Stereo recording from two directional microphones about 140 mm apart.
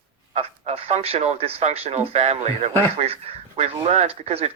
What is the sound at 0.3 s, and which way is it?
Speech, 50° right (ahead or behind).